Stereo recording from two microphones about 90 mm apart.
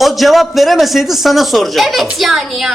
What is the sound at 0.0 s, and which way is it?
Speech, centre (ahead or behind).